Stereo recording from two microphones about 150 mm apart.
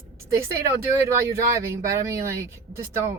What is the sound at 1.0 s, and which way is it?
Speech, 20° right (ahead or behind).